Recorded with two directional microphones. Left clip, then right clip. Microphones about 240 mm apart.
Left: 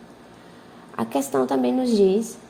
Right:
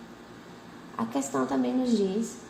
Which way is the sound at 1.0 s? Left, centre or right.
Left.